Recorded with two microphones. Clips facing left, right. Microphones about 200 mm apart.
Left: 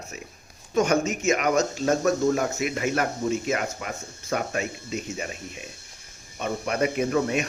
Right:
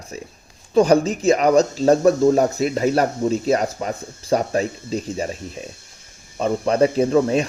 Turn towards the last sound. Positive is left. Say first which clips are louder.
# right 7 dB
turn(degrees=-30)  # may be behind; listen again after turning